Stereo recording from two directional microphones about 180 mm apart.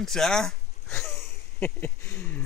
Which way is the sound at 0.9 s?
15° left (ahead or behind).